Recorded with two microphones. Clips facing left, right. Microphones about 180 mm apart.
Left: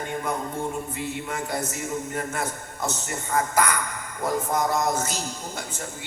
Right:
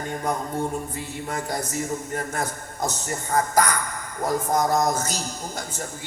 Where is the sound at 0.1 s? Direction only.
40° right (ahead or behind).